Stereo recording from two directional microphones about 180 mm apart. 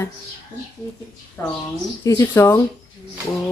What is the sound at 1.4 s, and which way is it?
A woman's voice, 15° left (ahead or behind).